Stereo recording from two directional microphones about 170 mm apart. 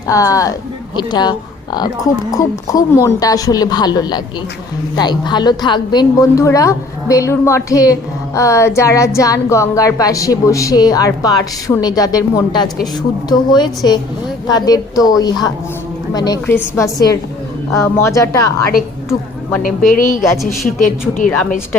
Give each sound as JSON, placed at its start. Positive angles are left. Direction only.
{"t": 0.1, "sound": "a woman's voice", "side_deg": 20}
{"t": 19.6, "sound": "speech", "side_deg": 55}
{"t": 20.3, "sound": "a woman's voice", "side_deg": 0}